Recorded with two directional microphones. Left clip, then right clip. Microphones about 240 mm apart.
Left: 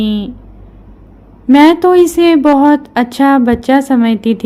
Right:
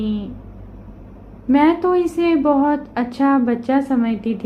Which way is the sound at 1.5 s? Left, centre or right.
Left.